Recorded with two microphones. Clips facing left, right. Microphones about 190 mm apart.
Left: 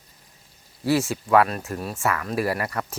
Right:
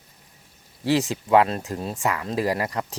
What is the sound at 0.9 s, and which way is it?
Speech, 15° right (ahead or behind).